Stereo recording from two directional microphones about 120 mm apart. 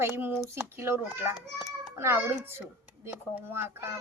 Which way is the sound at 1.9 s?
20° right (ahead or behind).